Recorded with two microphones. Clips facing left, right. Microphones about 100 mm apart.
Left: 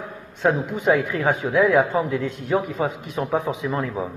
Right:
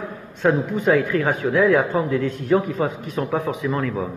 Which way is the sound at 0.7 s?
15° left (ahead or behind).